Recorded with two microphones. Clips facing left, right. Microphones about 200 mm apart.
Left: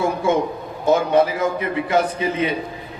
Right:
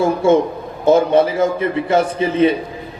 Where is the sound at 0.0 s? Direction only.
30° right (ahead or behind).